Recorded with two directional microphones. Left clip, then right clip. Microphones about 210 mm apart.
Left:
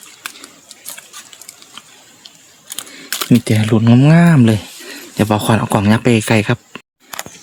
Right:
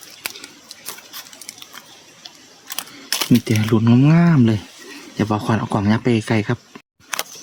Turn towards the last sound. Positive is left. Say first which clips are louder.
# left 6 dB
turn(degrees=45)  # may be behind; listen again after turning